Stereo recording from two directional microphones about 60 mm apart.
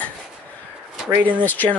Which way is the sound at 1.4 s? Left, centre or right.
Left.